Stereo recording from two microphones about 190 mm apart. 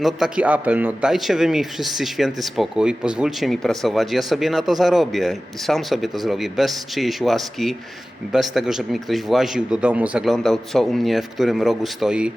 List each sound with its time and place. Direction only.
0.0 s speech: 5° right (ahead or behind)